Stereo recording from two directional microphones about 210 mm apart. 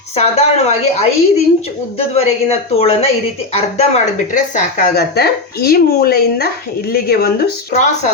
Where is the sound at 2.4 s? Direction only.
30° left (ahead or behind).